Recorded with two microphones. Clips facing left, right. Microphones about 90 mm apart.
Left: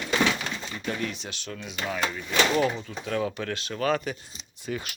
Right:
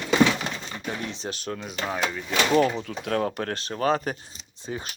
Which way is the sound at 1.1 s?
40° right (ahead or behind).